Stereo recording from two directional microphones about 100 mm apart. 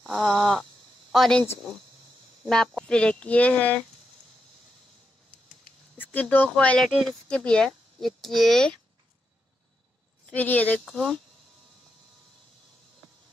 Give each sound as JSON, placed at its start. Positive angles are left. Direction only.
{"t": 0.0, "sound": "a sound", "side_deg": 5}
{"t": 2.4, "sound": "speech", "side_deg": 0}
{"t": 5.9, "sound": "speech", "side_deg": 20}
{"t": 6.9, "sound": "speech", "side_deg": 0}
{"t": 7.2, "sound": "speech", "side_deg": 10}
{"t": 10.2, "sound": "speech", "side_deg": 15}
{"t": 10.9, "sound": "speech", "side_deg": 0}